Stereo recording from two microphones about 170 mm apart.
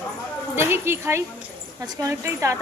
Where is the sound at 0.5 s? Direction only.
15° right (ahead or behind).